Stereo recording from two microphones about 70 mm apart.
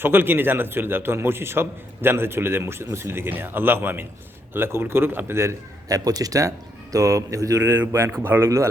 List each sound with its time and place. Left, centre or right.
0.0 s a man's voice: right
5.9 s speech: right
6.9 s mantra: right
7.7 s a man's voice: right
8.4 s mantra: right